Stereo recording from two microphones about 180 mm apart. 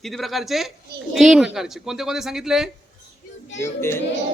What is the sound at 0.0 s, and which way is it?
Speech, centre (ahead or behind).